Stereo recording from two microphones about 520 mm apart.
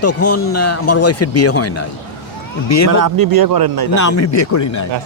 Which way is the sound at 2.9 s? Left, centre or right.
Right.